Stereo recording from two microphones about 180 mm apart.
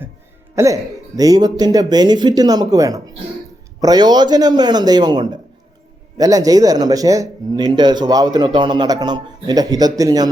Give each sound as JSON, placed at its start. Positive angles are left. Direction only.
{"t": 0.5, "sound": "speech", "side_deg": -15}